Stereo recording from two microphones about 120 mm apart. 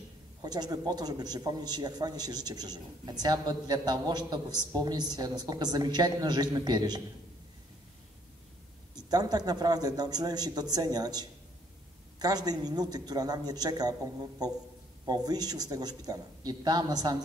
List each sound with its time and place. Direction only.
0.4 s a man's voice: 35° right (ahead or behind)
8.9 s a man's voice: 35° right (ahead or behind)